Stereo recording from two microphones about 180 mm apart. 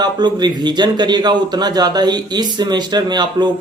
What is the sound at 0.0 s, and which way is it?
A man's voice, 25° right (ahead or behind).